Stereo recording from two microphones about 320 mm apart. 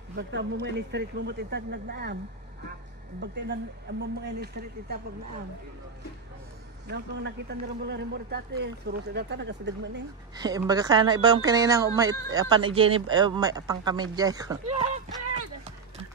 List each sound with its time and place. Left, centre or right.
0.1 s speech: right
3.2 s speech: right
6.9 s speech: right
10.3 s a woman's voice: centre